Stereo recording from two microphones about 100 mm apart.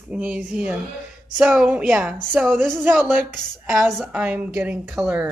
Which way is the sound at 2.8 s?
20° right (ahead or behind).